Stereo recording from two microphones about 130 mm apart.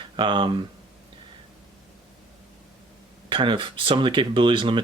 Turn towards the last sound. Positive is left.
turn(degrees=-40)  # may be behind; listen again after turning